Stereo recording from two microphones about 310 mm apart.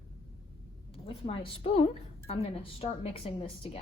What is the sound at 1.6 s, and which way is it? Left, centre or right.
A woman's voice, centre.